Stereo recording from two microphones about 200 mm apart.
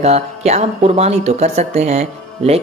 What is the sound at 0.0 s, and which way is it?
A woman's voice, 30° right (ahead or behind).